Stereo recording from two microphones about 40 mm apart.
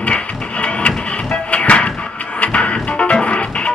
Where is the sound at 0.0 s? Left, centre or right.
Left.